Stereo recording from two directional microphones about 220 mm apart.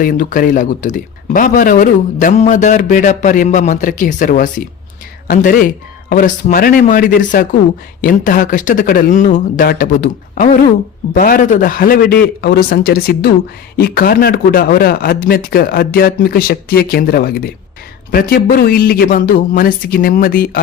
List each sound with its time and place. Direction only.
0.0 s speech: 40° left (ahead or behind)